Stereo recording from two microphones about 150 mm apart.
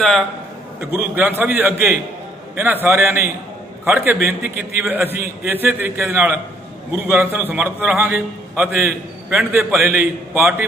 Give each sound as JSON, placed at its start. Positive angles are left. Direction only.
{"t": 0.7, "sound": "a man's voice", "side_deg": -10}